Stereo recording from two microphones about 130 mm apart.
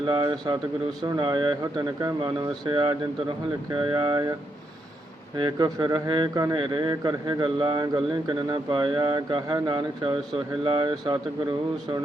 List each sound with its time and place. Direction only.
0.0 s speech: 35° right (ahead or behind)
5.4 s speech: 30° right (ahead or behind)